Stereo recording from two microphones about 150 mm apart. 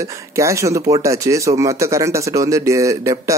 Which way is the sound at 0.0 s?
20° right (ahead or behind).